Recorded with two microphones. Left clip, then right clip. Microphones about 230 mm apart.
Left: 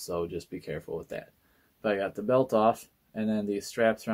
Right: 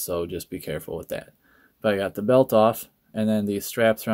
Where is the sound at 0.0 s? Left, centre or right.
Right.